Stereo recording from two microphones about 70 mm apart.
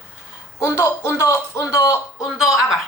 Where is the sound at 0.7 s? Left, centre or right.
Left.